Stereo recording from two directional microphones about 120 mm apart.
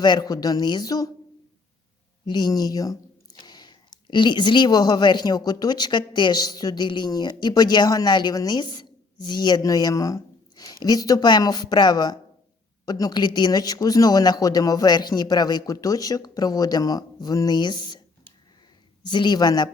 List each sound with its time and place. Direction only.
0.0 s speech: 35° left (ahead or behind)
2.2 s a woman's voice: 35° left (ahead or behind)
19.0 s speech: 40° left (ahead or behind)